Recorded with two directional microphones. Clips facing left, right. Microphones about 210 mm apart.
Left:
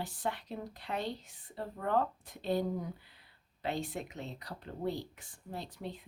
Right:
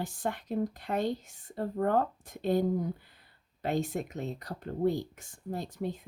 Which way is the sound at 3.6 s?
45° right (ahead or behind).